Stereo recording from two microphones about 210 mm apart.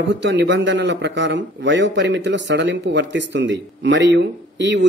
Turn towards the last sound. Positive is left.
turn(degrees=-60)  # may be behind; listen again after turning